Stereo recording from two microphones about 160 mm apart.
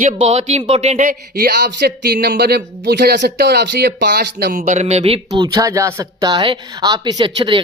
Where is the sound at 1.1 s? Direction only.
75° right (ahead or behind).